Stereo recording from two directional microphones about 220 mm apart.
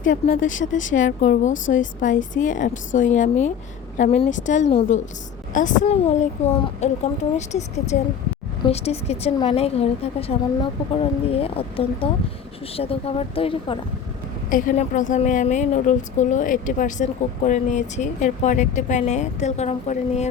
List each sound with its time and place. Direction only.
0.1 s a woman's voice: 35° left (ahead or behind)